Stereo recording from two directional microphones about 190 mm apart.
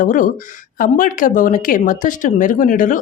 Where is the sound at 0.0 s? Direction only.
45° left (ahead or behind).